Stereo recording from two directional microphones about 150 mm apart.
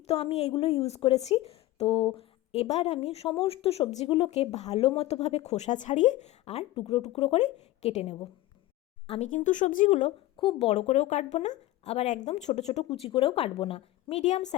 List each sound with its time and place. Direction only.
0.1 s speech: 45° left (ahead or behind)
9.3 s a woman's voice: 60° left (ahead or behind)
10.3 s speech: 40° left (ahead or behind)